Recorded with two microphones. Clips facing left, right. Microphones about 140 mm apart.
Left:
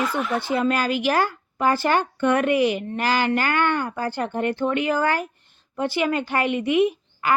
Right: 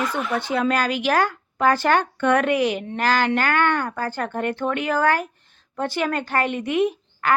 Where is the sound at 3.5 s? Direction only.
55° right (ahead or behind).